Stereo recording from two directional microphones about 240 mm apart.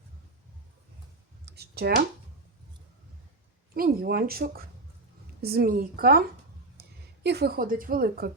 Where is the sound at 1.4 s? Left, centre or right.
Right.